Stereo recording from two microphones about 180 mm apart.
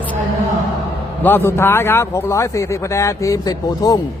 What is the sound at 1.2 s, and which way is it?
Speech, 10° left (ahead or behind).